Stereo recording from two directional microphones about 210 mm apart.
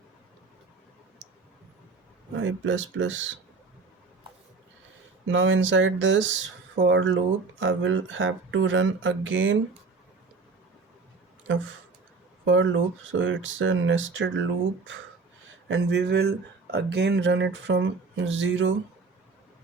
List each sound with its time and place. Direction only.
2.3 s speech: 65° right (ahead or behind)
5.2 s speech: 65° right (ahead or behind)
11.5 s speech: 65° right (ahead or behind)
15.7 s speech: 55° right (ahead or behind)